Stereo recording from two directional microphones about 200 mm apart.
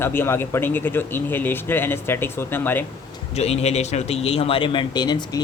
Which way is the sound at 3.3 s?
30° left (ahead or behind).